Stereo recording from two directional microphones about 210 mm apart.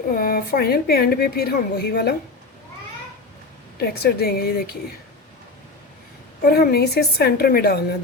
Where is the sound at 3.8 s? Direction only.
50° left (ahead or behind).